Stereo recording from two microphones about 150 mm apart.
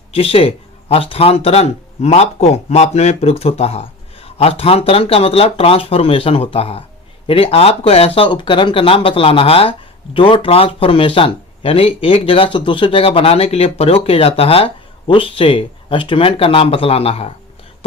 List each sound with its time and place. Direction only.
0.1 s speech: 40° left (ahead or behind)